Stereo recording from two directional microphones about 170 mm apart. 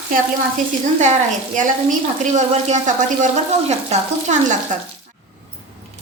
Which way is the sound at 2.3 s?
40° right (ahead or behind).